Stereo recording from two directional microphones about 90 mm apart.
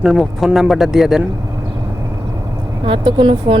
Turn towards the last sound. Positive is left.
turn(degrees=-70)  # may be behind; listen again after turning